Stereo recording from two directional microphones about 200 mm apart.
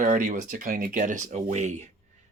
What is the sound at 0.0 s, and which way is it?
Speech, 40° right (ahead or behind).